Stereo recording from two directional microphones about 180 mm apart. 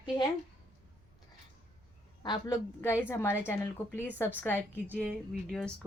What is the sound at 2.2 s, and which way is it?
Speech, 25° left (ahead or behind).